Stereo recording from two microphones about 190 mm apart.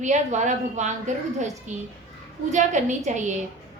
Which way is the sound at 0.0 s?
40° right (ahead or behind).